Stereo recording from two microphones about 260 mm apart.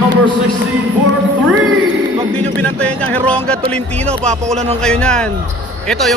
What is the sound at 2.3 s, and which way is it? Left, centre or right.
Speech, centre.